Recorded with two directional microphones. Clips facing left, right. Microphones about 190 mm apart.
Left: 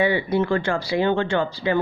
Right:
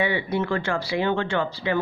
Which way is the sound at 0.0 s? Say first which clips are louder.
Left 4 dB; 35° left (ahead or behind).